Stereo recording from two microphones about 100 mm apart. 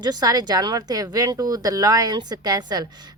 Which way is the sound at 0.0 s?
40° right (ahead or behind).